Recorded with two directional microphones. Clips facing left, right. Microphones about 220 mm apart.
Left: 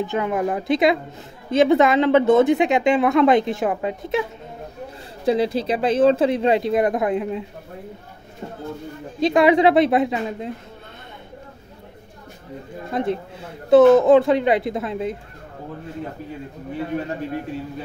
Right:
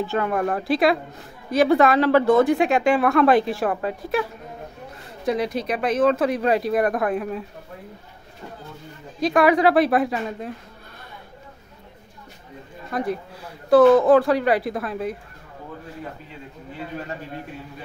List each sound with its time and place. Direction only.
0.0 s speech: 20° left (ahead or behind)
9.2 s speech: 25° left (ahead or behind)
12.9 s speech: 25° left (ahead or behind)